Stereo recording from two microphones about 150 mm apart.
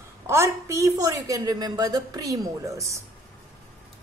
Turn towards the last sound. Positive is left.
turn(degrees=-20)  # may be behind; listen again after turning